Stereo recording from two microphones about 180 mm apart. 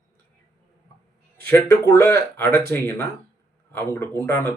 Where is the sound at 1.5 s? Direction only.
15° left (ahead or behind).